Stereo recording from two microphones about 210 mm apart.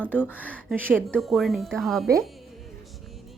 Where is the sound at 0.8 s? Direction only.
10° right (ahead or behind).